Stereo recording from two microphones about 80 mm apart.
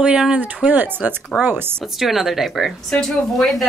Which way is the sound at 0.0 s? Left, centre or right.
Centre.